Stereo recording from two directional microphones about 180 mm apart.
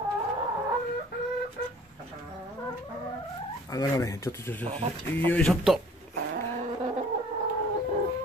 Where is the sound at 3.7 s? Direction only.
20° left (ahead or behind); by 5.8 s centre (ahead or behind).